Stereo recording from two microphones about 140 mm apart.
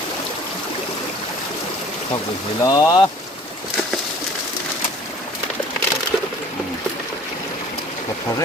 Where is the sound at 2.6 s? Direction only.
25° left (ahead or behind).